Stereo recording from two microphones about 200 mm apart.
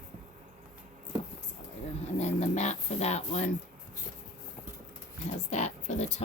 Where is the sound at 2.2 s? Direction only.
35° left (ahead or behind).